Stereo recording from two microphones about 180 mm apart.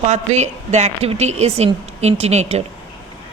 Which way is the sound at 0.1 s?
40° right (ahead or behind).